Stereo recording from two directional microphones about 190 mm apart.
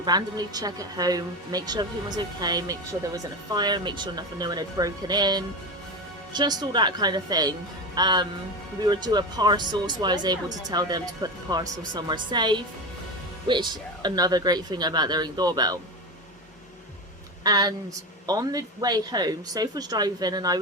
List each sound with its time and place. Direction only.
0.0 s speech: 20° right (ahead or behind)
17.4 s a woman's voice: 20° right (ahead or behind)